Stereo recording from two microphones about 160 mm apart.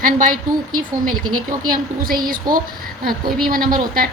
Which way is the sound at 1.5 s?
60° right (ahead or behind).